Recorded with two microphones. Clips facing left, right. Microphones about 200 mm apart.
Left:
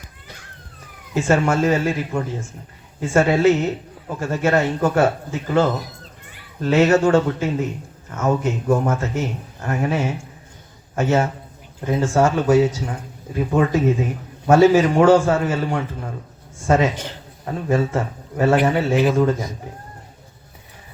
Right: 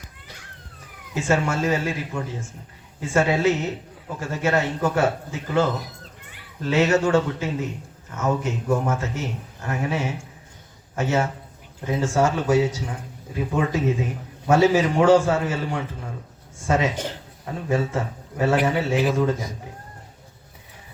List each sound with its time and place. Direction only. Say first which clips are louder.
1.1 s a man's voice: left 5 dB; 50° left (ahead or behind)